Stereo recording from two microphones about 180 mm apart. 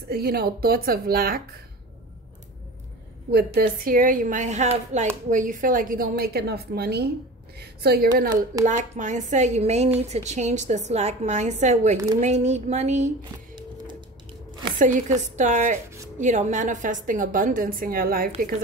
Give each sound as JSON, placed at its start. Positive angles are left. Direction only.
{"t": 0.1, "sound": "a woman's voice", "side_deg": -60}
{"t": 3.3, "sound": "a woman's voice", "side_deg": -60}
{"t": 8.6, "sound": "a woman's voice", "side_deg": -45}
{"t": 13.3, "sound": "a sound", "side_deg": -25}
{"t": 15.3, "sound": "a woman's voice", "side_deg": -40}